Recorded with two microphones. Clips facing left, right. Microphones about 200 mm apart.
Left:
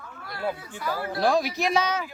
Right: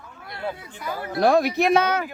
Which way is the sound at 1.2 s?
60° right (ahead or behind).